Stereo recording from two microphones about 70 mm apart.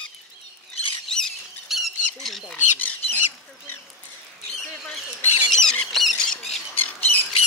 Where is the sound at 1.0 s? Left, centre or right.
Centre.